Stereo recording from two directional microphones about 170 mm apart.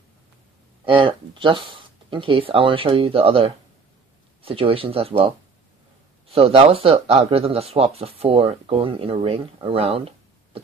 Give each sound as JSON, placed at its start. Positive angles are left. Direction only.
{"t": 0.8, "sound": "speech", "side_deg": -30}
{"t": 6.3, "sound": "speech", "side_deg": -35}